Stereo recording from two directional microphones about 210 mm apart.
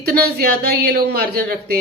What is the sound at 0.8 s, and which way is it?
Speech, 50° right (ahead or behind).